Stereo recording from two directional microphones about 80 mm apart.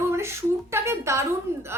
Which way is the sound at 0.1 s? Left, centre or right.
Right.